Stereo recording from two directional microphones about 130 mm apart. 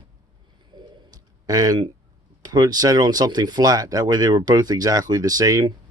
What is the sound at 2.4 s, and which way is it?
Speech, 30° right (ahead or behind).